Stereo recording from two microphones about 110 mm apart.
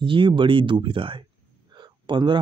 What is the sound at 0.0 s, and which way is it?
Speech, 50° right (ahead or behind).